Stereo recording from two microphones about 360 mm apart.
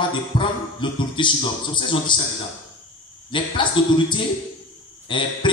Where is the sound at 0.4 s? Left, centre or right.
Centre.